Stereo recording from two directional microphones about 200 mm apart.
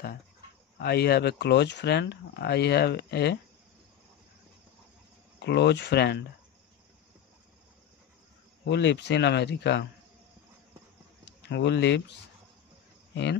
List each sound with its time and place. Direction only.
0.7 s speech: 55° left (ahead or behind)
5.4 s speech: 60° left (ahead or behind)
8.6 s speech: 60° left (ahead or behind)
11.4 s speech: 60° left (ahead or behind)